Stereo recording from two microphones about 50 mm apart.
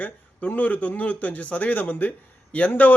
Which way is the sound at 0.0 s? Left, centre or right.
Left.